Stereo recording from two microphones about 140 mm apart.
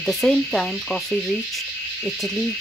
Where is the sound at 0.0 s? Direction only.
Centre (ahead or behind).